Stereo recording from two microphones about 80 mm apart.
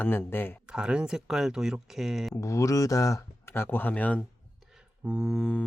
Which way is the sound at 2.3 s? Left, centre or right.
Left.